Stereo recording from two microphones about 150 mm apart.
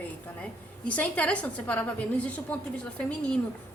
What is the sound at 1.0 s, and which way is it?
A woman's voice, 10° left (ahead or behind).